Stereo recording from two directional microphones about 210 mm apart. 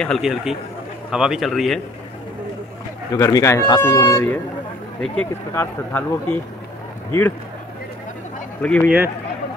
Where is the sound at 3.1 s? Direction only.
15° left (ahead or behind).